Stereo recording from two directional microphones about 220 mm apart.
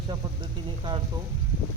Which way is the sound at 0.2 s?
15° right (ahead or behind).